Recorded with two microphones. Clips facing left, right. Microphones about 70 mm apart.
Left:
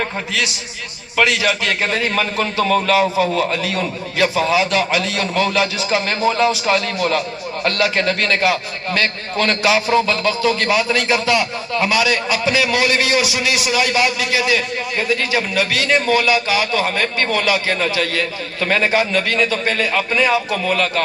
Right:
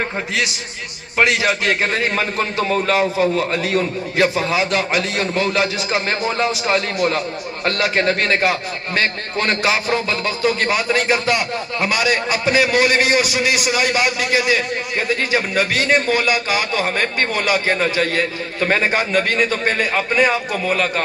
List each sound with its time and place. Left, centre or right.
1.1 s a man's voice: right